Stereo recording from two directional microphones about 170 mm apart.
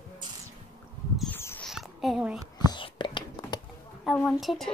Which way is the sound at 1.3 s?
10° left (ahead or behind).